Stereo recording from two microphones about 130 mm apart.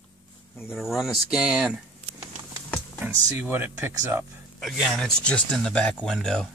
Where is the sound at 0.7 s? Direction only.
Centre (ahead or behind).